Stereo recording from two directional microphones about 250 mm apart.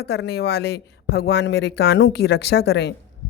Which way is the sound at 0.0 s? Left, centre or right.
Left.